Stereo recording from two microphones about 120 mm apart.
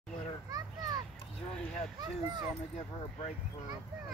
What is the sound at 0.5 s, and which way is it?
Children playing, 30° right (ahead or behind).